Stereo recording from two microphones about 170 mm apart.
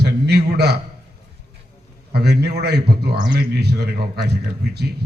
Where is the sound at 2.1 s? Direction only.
75° right (ahead or behind).